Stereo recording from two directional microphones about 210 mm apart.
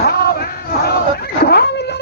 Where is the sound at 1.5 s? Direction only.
50° left (ahead or behind).